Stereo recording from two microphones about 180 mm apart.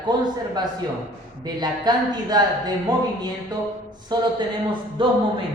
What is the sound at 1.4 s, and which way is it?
A woman's voice, 25° right (ahead or behind).